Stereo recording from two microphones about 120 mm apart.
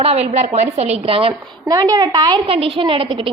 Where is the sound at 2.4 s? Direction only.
50° right (ahead or behind).